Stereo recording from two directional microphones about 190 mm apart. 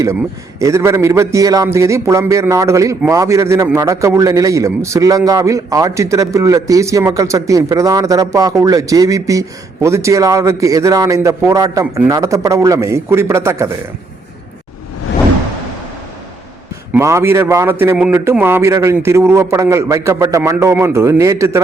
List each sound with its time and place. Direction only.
0.6 s a man's voice: 15° right (ahead or behind)
16.9 s a man's voice: 15° right (ahead or behind)